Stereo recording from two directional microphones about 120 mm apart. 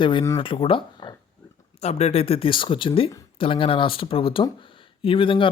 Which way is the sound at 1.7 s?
60° left (ahead or behind).